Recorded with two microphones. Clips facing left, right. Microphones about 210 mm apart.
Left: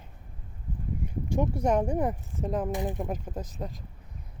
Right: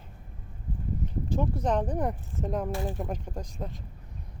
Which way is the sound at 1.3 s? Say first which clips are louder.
Left 2 dB; 15° left (ahead or behind).